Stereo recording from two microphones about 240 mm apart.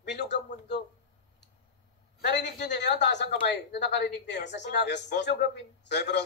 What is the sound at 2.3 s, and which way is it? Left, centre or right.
A woman's voice, left.